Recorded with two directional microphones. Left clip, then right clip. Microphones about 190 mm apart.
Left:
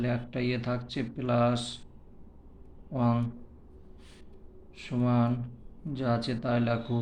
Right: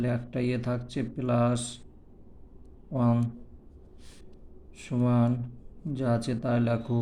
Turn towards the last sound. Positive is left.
turn(degrees=-40)  # may be behind; listen again after turning